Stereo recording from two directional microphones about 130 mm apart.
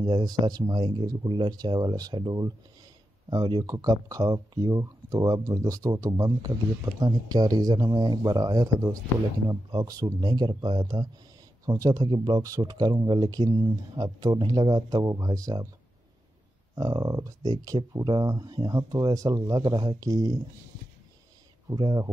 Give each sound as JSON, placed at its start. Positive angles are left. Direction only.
{"t": 0.0, "sound": "speech", "side_deg": -35}
{"t": 16.7, "sound": "speech", "side_deg": -25}
{"t": 21.7, "sound": "speech", "side_deg": -35}